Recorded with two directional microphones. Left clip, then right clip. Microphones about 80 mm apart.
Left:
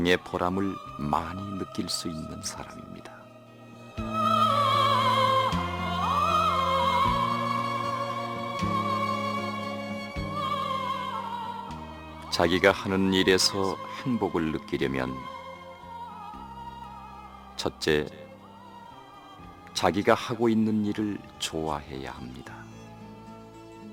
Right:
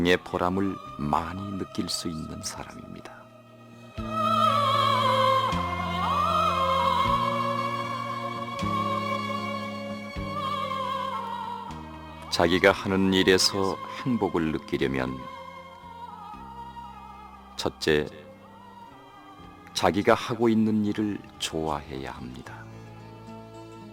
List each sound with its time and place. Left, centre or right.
0.0 s speech: right
3.9 s music: right
12.2 s speech: right
17.6 s speech: right
19.7 s speech: right